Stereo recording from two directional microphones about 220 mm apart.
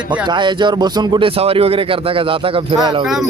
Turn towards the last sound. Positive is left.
turn(degrees=-20)  # may be behind; listen again after turning